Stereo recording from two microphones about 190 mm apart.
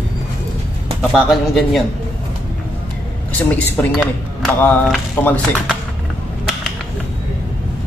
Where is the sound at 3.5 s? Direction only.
10° left (ahead or behind).